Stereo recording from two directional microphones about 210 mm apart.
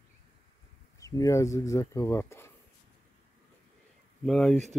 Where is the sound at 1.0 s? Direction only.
15° left (ahead or behind).